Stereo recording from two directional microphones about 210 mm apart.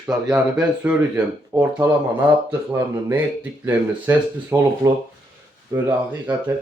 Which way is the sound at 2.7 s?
10° right (ahead or behind).